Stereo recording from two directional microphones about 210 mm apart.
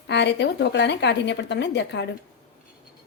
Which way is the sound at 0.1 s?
55° left (ahead or behind).